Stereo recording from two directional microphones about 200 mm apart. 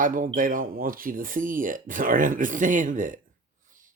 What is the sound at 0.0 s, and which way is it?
Speech, 45° right (ahead or behind).